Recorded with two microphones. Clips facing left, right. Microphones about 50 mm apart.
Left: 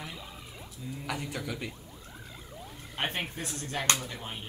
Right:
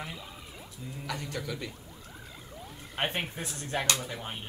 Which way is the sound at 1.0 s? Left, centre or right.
Centre.